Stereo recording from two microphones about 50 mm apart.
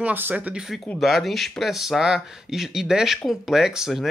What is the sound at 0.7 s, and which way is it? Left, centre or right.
Speech, centre.